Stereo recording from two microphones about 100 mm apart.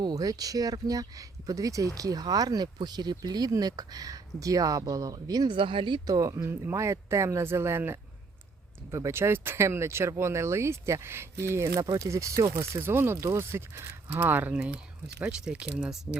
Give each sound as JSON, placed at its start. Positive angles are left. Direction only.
{"t": 0.0, "sound": "speech", "side_deg": -40}
{"t": 5.5, "sound": "speech", "side_deg": -60}
{"t": 6.1, "sound": "speech", "side_deg": -35}